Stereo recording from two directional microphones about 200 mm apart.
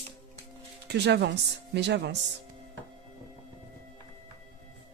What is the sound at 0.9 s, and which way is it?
Speech, 60° right (ahead or behind).